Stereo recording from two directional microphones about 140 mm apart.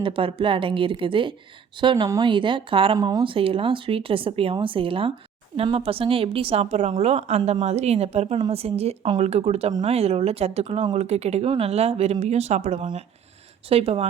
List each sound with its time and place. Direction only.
0.0 s a woman's voice: 40° right (ahead or behind)